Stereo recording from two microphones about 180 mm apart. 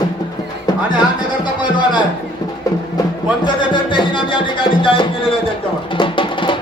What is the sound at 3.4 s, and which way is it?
Music, 25° left (ahead or behind).